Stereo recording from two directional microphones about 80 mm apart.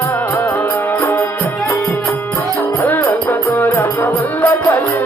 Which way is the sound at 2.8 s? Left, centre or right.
Left.